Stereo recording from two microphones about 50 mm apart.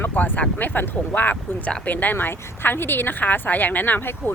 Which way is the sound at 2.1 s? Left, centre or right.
Left.